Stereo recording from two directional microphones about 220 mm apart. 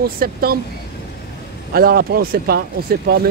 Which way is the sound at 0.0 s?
45° right (ahead or behind).